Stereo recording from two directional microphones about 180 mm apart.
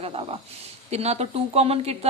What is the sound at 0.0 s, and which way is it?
Speech, 30° right (ahead or behind).